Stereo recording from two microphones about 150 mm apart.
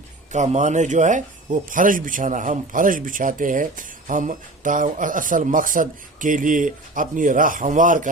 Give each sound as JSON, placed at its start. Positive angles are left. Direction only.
{"t": 0.3, "sound": "speech", "side_deg": -50}